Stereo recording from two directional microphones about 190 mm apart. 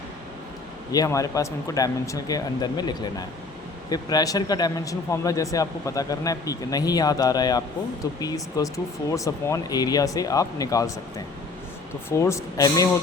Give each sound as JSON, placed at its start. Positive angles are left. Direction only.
{"t": 0.9, "sound": "a man's voice", "side_deg": 15}
{"t": 12.0, "sound": "speech", "side_deg": 15}